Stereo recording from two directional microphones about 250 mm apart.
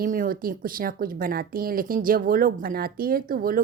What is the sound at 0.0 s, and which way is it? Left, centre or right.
A woman's voice, right.